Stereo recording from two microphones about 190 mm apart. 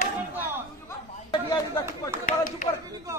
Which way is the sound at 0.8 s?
20° left (ahead or behind).